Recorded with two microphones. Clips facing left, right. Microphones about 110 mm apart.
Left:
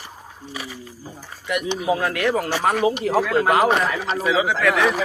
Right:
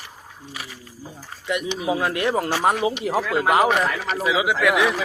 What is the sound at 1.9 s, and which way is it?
Speech, 20° right (ahead or behind).